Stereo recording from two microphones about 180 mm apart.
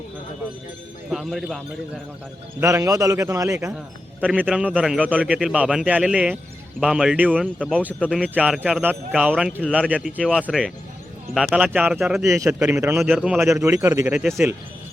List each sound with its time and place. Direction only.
1.1 s a man's voice: centre (ahead or behind)
2.6 s speech: 15° right (ahead or behind)
4.2 s a man's voice: 5° right (ahead or behind)
13.5 s speech: 15° right (ahead or behind)
14.1 s a man's voice: centre (ahead or behind)